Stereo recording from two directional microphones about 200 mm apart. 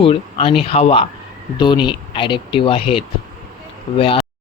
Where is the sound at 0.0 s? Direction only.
30° left (ahead or behind).